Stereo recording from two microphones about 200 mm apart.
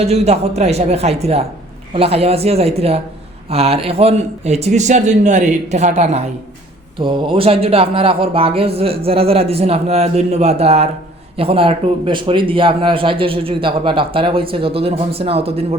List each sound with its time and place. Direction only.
0.0 s a man's voice: 30° right (ahead or behind)
7.0 s speech: 25° right (ahead or behind)